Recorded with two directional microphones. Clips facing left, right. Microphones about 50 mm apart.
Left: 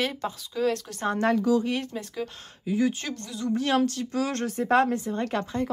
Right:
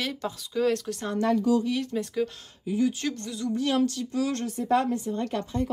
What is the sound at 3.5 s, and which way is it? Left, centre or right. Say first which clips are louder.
A woman's voice: left 1 dB; left.